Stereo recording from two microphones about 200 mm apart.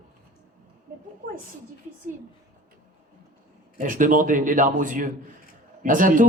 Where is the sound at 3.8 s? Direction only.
40° right (ahead or behind).